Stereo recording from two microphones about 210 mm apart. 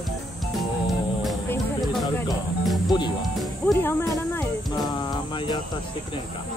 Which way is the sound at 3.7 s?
10° left (ahead or behind).